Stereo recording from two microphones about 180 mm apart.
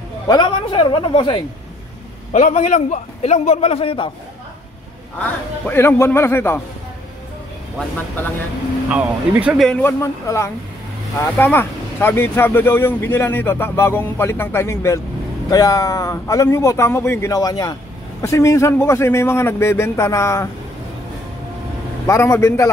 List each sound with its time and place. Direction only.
0.3 s speech: 25° left (ahead or behind)
2.3 s a man's voice: 40° left (ahead or behind)
5.2 s speech: 10° left (ahead or behind)
8.9 s speech: 5° right (ahead or behind)
9.7 s speech: 10° left (ahead or behind)
22.0 s speech: 15° left (ahead or behind)